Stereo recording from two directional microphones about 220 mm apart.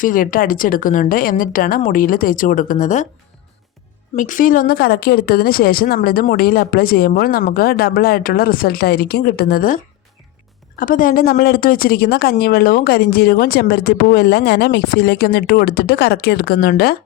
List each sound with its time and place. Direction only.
0.0 s a woman's voice: 40° left (ahead or behind)
4.1 s a woman's voice: 35° left (ahead or behind)